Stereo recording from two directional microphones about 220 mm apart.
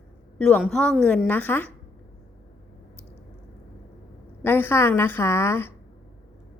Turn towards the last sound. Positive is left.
turn(degrees=10)  # may be behind; listen again after turning